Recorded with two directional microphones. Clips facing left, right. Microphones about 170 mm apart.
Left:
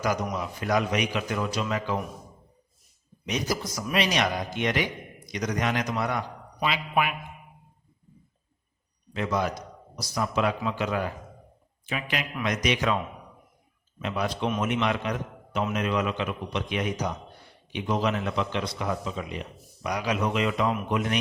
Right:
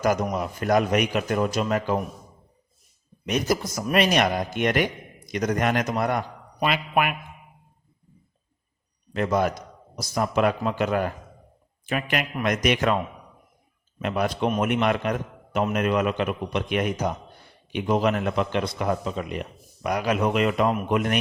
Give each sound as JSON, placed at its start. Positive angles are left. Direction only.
{"t": 0.0, "sound": "a man's voice", "side_deg": -50}
{"t": 3.2, "sound": "a man's voice", "side_deg": -55}
{"t": 9.1, "sound": "a man's voice", "side_deg": -50}
{"t": 14.0, "sound": "a man's voice", "side_deg": -55}